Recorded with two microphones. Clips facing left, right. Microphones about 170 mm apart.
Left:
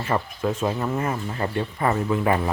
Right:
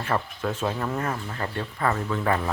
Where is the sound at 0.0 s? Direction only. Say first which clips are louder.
Left 3 dB; 10° left (ahead or behind).